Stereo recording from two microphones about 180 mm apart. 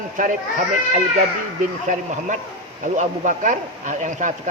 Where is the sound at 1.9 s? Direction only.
45° right (ahead or behind).